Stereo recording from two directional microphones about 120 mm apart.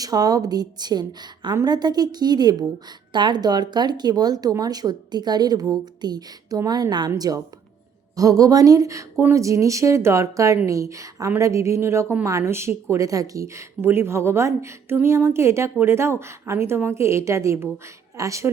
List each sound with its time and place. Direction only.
0.0 s a woman's voice: 30° right (ahead or behind)